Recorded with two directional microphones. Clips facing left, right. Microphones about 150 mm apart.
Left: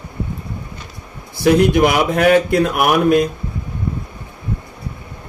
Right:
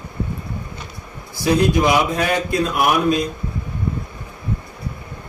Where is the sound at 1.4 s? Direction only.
65° left (ahead or behind).